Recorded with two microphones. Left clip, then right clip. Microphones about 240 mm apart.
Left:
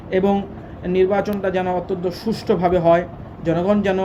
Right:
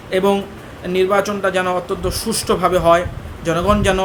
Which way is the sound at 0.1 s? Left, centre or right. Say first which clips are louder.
Right 3 dB; centre.